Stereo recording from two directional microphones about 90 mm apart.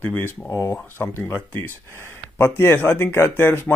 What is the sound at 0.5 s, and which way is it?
Speech, 40° left (ahead or behind).